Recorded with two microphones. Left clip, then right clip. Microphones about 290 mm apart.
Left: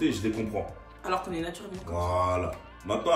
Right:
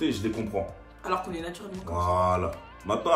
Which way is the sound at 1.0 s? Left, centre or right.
Centre.